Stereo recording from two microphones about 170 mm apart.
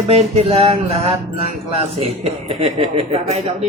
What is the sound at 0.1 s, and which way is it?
Music, 40° right (ahead or behind).